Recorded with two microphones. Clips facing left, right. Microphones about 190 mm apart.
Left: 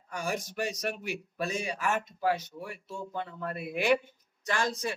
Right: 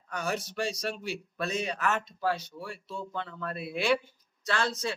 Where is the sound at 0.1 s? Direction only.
10° left (ahead or behind).